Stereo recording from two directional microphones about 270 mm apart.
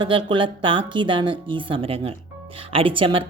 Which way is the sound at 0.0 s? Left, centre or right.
Centre.